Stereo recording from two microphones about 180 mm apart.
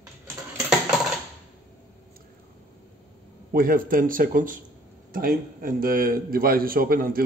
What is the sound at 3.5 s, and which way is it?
A man's voice, 50° right (ahead or behind).